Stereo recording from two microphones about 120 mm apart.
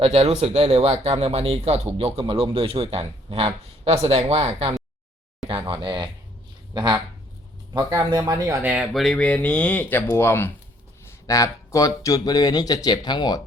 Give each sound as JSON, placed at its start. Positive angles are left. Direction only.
{"t": 0.0, "sound": "speech", "side_deg": -60}
{"t": 5.5, "sound": "a sound", "side_deg": -45}
{"t": 6.7, "sound": "speech", "side_deg": -40}
{"t": 7.7, "sound": "speech", "side_deg": -30}
{"t": 8.6, "sound": "speech", "side_deg": -15}
{"t": 8.9, "sound": "speech", "side_deg": 0}